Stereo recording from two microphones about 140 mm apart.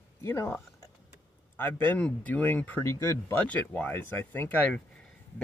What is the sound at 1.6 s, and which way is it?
Speech, 15° left (ahead or behind).